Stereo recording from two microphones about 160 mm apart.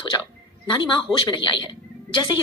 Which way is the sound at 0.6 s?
30° left (ahead or behind).